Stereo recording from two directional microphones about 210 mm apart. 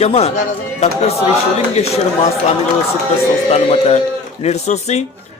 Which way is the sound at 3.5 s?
30° left (ahead or behind).